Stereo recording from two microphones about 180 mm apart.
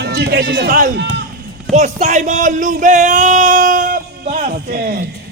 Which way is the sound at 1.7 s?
40° right (ahead or behind).